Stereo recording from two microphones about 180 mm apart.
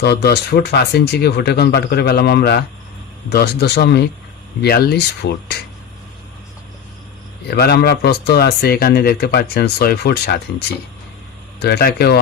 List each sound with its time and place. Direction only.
0.0 s speech: 65° left (ahead or behind)
7.4 s speech: 65° left (ahead or behind)
11.6 s speech: 65° left (ahead or behind)